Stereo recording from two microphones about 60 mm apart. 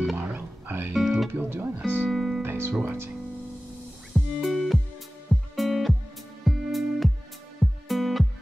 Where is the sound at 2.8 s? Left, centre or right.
Right.